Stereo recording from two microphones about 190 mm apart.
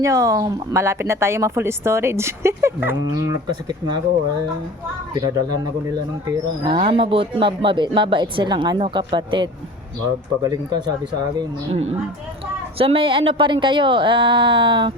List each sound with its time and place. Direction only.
0.0 s a woman's voice: 15° right (ahead or behind)
5.9 s a man's voice: 20° right (ahead or behind)
12.8 s a man's voice: 30° right (ahead or behind)